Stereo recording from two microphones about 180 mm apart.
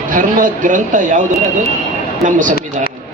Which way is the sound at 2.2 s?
45° right (ahead or behind).